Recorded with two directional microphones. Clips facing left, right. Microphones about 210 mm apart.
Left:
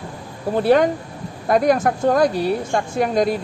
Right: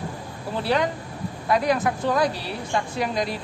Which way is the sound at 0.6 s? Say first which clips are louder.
Left 8 dB; 50° left (ahead or behind).